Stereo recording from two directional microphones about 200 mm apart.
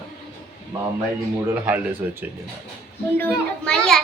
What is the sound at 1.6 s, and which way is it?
Speech, 10° right (ahead or behind).